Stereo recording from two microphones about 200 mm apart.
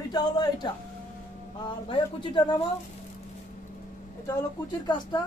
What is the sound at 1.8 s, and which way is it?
Speech, 25° left (ahead or behind).